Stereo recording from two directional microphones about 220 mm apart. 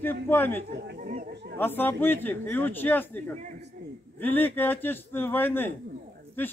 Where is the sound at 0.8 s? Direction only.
45° right (ahead or behind).